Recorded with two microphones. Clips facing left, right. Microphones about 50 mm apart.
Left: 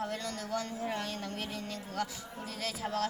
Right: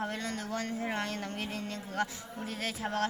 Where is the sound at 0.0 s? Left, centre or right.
Right.